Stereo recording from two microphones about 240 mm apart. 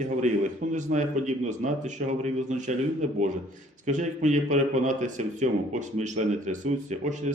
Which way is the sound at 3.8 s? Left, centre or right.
Right.